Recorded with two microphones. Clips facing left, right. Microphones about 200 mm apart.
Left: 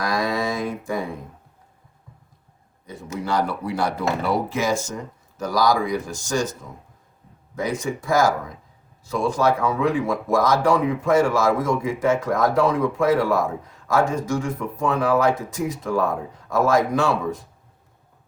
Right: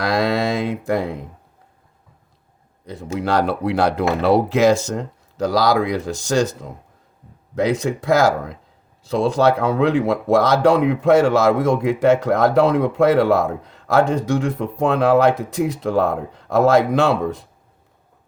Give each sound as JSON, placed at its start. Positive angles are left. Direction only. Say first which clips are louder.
{"t": 0.0, "sound": "mantra", "louder": "right 5 dB", "side_deg": -70}
{"t": 2.8, "sound": "speech", "louder": "right 6 dB", "side_deg": -75}